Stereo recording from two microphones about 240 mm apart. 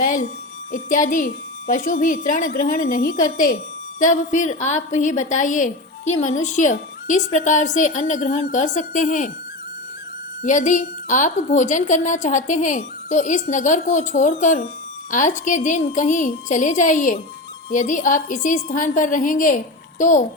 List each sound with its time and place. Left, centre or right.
0.7 s a woman's voice: left
10.4 s a woman's voice: left